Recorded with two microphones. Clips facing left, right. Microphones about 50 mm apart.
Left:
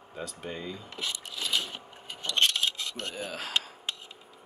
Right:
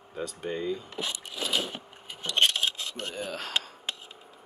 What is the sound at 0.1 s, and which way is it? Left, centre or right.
Speech, centre.